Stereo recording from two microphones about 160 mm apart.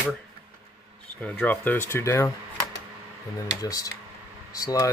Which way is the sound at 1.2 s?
10° left (ahead or behind).